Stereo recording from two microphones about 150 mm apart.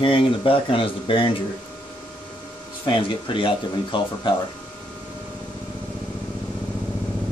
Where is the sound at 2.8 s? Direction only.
35° left (ahead or behind).